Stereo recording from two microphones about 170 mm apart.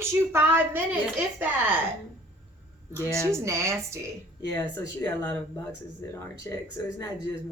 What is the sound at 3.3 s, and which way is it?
Speech, 15° right (ahead or behind).